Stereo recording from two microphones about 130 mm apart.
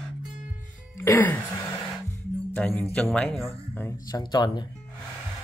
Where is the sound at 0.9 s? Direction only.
20° left (ahead or behind).